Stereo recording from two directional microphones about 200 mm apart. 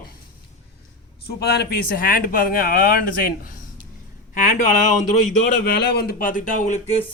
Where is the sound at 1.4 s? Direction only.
55° left (ahead or behind).